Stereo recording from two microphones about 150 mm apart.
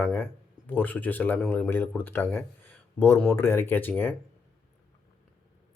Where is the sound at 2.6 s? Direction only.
15° left (ahead or behind).